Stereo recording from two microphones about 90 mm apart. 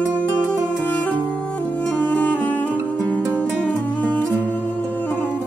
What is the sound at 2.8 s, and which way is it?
Music, 20° right (ahead or behind).